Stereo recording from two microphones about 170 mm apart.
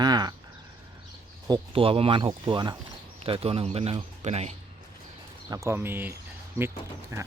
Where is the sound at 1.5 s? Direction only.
30° right (ahead or behind).